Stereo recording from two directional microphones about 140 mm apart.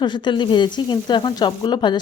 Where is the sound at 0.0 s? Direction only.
35° left (ahead or behind).